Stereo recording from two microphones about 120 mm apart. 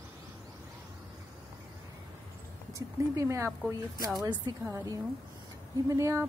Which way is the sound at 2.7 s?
25° right (ahead or behind).